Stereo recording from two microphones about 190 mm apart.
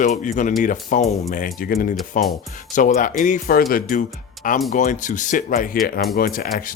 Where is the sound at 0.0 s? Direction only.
45° left (ahead or behind).